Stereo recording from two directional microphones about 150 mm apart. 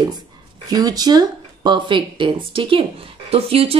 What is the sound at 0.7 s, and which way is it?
A woman's voice, 25° right (ahead or behind).